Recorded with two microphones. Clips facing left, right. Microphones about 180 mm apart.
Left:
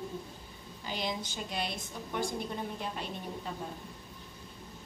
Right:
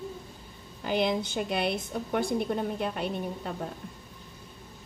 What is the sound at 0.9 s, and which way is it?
A woman's voice, 60° right (ahead or behind).